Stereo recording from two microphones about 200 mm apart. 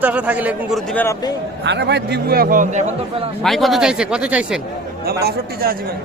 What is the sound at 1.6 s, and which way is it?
A man's voice, 60° right (ahead or behind).